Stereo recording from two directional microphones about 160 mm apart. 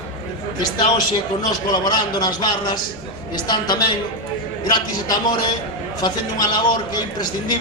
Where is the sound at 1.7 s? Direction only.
25° left (ahead or behind).